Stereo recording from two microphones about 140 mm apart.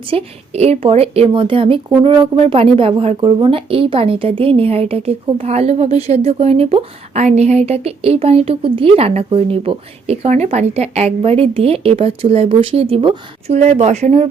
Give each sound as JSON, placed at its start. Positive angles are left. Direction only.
{"t": 0.1, "sound": "speech", "side_deg": -45}